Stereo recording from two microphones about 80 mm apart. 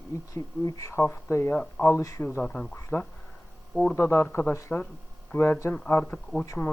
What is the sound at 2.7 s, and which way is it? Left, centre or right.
Speech, left.